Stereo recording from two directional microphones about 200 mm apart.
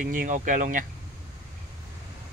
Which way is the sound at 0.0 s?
40° right (ahead or behind).